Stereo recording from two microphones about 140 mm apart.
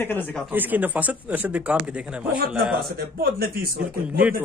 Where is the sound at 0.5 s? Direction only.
10° right (ahead or behind).